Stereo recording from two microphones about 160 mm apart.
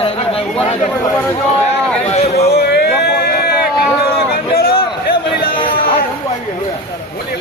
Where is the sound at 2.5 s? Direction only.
80° left.